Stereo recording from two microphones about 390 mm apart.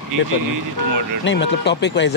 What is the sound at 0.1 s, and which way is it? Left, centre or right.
Speech, right.